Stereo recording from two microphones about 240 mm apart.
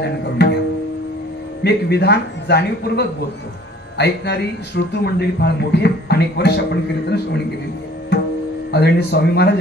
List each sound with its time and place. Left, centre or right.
0.0 s tabla: left
1.6 s speech: left
8.7 s speech: left